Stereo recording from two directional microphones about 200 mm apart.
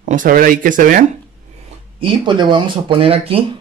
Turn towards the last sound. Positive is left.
turn(degrees=-30)  # may be behind; listen again after turning